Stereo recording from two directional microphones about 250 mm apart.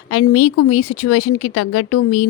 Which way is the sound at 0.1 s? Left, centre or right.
Left.